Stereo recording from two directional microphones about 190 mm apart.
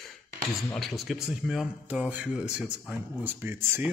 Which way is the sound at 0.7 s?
Centre (ahead or behind).